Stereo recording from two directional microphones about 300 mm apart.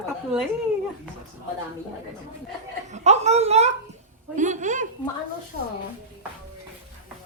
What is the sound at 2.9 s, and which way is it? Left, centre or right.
A child's voice, right.